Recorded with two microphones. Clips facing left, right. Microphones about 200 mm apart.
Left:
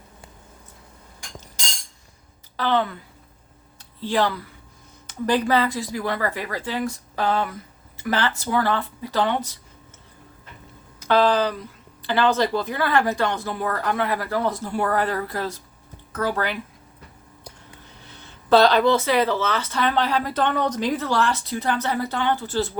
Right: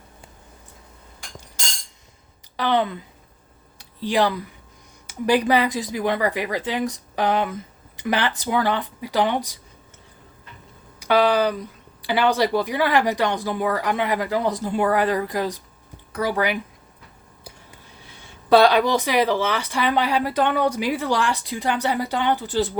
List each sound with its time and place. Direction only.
2.6 s speech: 15° right (ahead or behind)
11.0 s speech: 15° right (ahead or behind)
18.0 s speech: 10° right (ahead or behind)